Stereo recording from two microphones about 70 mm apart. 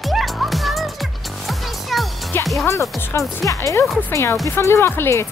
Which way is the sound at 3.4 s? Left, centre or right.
Left.